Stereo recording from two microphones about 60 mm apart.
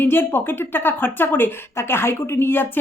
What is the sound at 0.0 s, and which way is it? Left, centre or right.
Speech, left.